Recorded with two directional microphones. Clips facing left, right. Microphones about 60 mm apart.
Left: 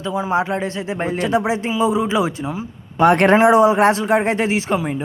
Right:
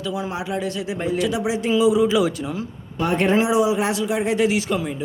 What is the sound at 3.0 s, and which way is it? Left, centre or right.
Speech, left.